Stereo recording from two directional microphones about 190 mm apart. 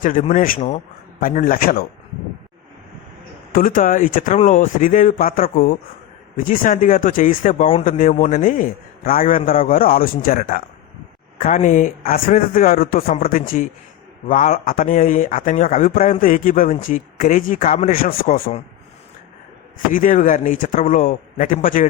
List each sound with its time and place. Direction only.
0.0 s a man's voice: 40° left (ahead or behind)
3.5 s a man's voice: 45° left (ahead or behind)
19.9 s a man's voice: 45° left (ahead or behind)